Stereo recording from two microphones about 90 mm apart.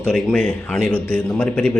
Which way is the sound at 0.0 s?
10° left (ahead or behind).